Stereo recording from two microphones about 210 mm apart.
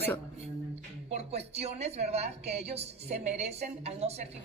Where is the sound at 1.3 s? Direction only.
30° right (ahead or behind).